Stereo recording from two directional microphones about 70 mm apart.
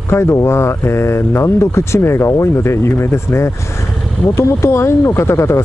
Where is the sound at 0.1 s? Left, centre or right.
Left.